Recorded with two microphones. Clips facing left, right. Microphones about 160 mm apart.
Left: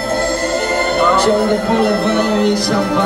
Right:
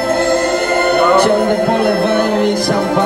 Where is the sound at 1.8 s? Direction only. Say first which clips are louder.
Right 1 dB; 55° right (ahead or behind).